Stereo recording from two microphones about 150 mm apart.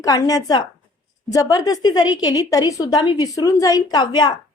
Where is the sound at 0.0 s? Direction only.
25° left (ahead or behind).